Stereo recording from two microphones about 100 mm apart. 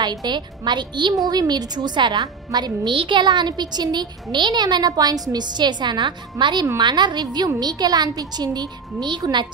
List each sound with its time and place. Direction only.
0.0 s a woman's voice: 45° right (ahead or behind)